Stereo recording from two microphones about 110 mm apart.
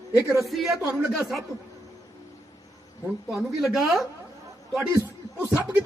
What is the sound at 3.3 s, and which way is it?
Speech, centre (ahead or behind).